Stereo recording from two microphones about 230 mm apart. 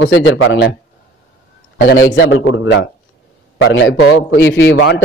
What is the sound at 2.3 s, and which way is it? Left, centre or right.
Speech, left.